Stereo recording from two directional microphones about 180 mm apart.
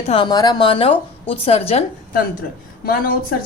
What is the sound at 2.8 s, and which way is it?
Speech, 55° left (ahead or behind).